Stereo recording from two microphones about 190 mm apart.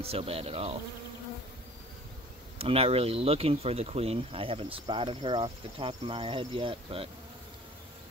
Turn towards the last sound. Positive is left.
turn(degrees=-30)  # may be behind; listen again after turning